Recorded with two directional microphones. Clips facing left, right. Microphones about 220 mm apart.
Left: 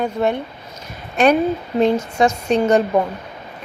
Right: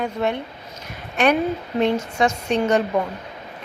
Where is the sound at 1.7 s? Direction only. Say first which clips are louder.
Left 4 dB; 35° left (ahead or behind).